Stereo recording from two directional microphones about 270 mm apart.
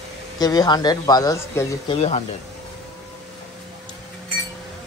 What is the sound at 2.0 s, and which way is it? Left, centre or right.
Speech, left.